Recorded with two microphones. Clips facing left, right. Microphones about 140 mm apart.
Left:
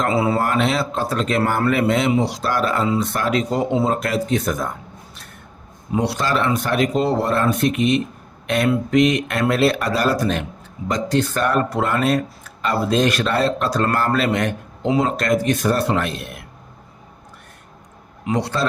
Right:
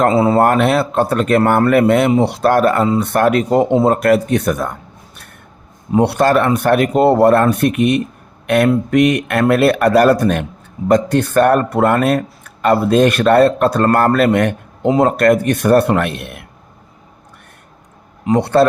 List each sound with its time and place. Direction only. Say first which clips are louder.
0.1 s speech: right 6 dB; 40° right (ahead or behind)
0.3 s speech: right 7 dB; 55° right (ahead or behind)
3.0 s speech: right 7 dB; 60° right (ahead or behind)
6.0 s speech: right 8 dB; 60° right (ahead or behind)
18.3 s speech: right 10 dB; 55° right (ahead or behind)